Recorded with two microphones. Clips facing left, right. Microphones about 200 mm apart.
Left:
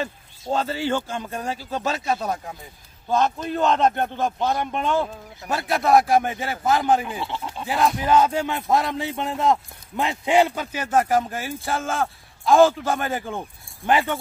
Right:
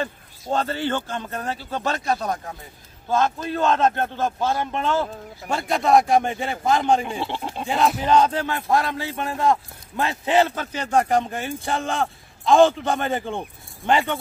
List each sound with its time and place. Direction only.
0.0 s speech: 5° left (ahead or behind)
3.1 s speech: 20° left (ahead or behind)
5.0 s speech: 5° left (ahead or behind)
7.3 s goat: 25° right (ahead or behind)
7.6 s speech: centre (ahead or behind)